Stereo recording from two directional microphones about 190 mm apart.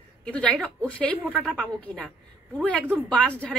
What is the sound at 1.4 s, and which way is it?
Speech, 5° right (ahead or behind).